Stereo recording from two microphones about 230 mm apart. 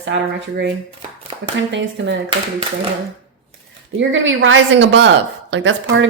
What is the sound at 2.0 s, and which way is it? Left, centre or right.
Speech, right.